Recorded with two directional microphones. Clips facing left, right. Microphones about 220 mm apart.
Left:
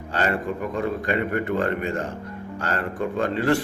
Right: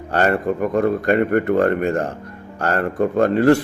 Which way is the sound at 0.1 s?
50° right (ahead or behind).